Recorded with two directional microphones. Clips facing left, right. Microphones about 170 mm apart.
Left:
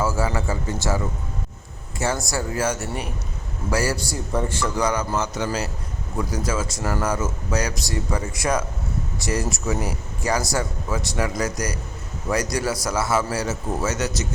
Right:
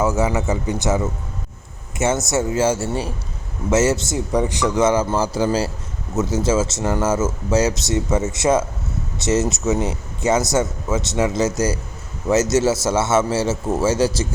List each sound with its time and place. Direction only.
0.0 s speech: 20° right (ahead or behind)